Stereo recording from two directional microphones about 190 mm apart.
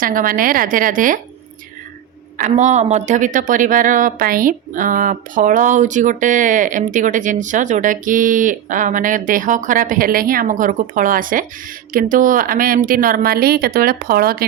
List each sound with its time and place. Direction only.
0.0 s speech: 45° right (ahead or behind)
2.4 s speech: 40° right (ahead or behind)